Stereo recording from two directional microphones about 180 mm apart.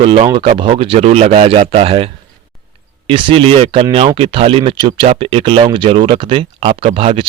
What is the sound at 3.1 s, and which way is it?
Speech, 30° right (ahead or behind).